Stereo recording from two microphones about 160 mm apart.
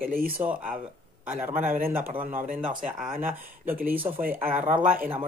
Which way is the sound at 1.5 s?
60° right (ahead or behind).